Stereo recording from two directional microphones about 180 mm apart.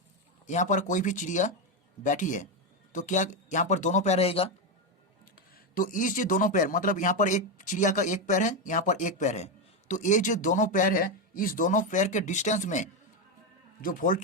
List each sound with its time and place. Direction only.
0.4 s speech: 45° left (ahead or behind)
5.5 s speech: 50° left (ahead or behind)